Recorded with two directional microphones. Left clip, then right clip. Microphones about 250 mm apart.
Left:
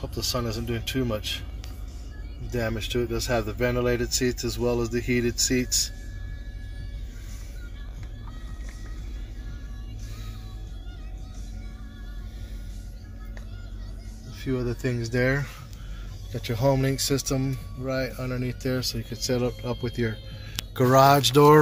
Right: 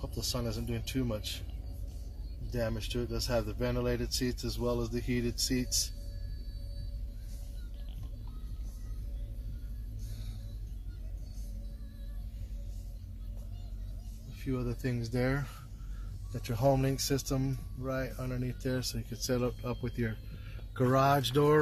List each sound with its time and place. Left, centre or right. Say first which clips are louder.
0.0 s speech: left 8 dB; centre
2.5 s speech: left 7 dB; centre
14.5 s speech: left 8 dB; centre
16.4 s speech: left 5 dB; centre
20.7 s speech: left 10 dB; centre